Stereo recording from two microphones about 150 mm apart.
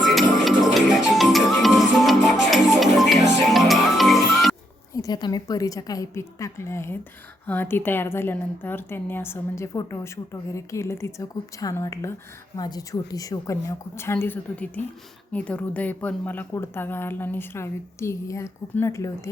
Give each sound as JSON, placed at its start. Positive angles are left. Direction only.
{"t": 0.1, "sound": "music", "side_deg": 0}
{"t": 4.9, "sound": "a woman's voice", "side_deg": 25}